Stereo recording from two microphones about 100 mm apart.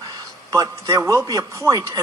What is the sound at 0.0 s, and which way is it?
A man's voice, 35° right (ahead or behind).